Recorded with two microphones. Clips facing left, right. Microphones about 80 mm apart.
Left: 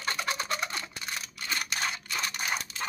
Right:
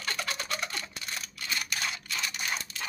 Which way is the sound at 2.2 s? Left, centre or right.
Left.